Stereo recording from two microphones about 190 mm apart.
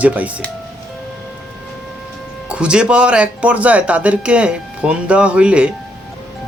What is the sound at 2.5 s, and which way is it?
Speech, 5° right (ahead or behind).